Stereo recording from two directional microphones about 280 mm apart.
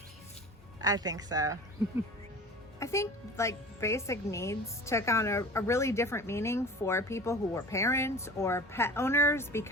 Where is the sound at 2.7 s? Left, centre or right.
Centre.